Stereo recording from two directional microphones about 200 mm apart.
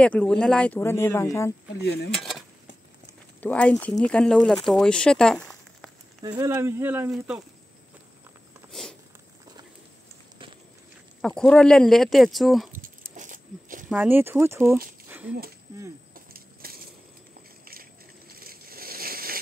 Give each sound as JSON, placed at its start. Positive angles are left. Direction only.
{"t": 0.0, "sound": "speech", "side_deg": 5}
{"t": 1.8, "sound": "speech", "side_deg": 55}
{"t": 2.1, "sound": "a sound", "side_deg": 0}
{"t": 3.3, "sound": "speech", "side_deg": 5}
{"t": 6.2, "sound": "speech", "side_deg": -20}
{"t": 11.1, "sound": "speech", "side_deg": 5}
{"t": 13.1, "sound": "a sound", "side_deg": -40}
{"t": 13.8, "sound": "speech", "side_deg": -10}
{"t": 16.3, "sound": "a sound", "side_deg": -50}
{"t": 18.4, "sound": "crushing", "side_deg": -45}